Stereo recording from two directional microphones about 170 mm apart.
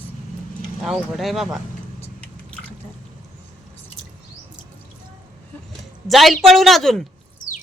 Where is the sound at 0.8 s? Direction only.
Centre (ahead or behind).